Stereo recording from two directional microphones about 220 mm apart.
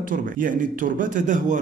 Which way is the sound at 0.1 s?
35° right (ahead or behind).